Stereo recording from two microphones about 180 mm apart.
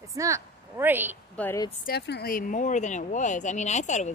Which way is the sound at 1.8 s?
65° left (ahead or behind).